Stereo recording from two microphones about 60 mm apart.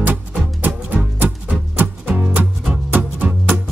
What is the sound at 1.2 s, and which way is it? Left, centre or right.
Music, right.